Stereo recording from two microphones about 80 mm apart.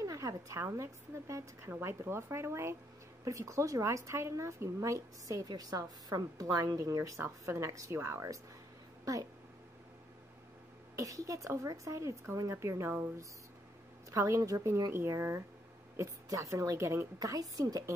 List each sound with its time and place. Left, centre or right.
0.0 s a woman's voice: right
11.0 s speech: right
16.0 s a woman's voice: right